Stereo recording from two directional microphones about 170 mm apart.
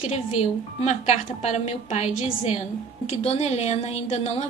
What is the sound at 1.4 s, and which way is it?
A woman's voice, 40° left (ahead or behind).